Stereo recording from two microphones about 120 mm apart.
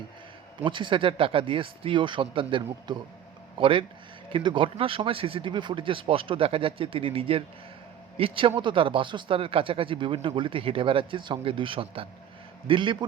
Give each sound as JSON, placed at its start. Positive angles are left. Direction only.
{"t": 0.6, "sound": "speech", "side_deg": -45}